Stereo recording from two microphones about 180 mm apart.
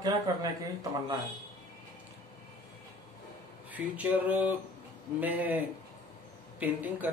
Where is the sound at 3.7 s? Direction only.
10° right (ahead or behind).